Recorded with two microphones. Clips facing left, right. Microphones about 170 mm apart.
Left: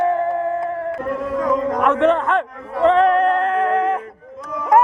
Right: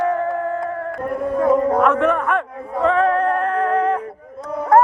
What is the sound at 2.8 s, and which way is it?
Music, 20° left (ahead or behind).